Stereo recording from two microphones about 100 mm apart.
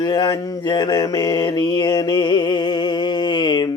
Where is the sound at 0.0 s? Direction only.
45° left (ahead or behind).